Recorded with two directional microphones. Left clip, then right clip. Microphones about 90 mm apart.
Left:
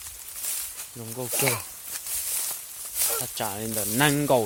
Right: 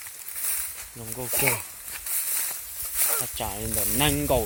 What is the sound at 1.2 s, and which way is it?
Speech, 50° left (ahead or behind).